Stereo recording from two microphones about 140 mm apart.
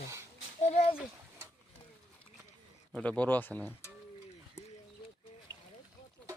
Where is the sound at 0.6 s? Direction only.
50° left (ahead or behind).